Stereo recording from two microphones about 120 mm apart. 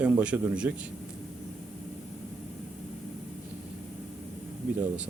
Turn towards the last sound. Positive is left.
turn(degrees=-10)  # may be behind; listen again after turning